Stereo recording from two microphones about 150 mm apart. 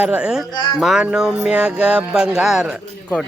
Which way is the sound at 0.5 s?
30° left (ahead or behind).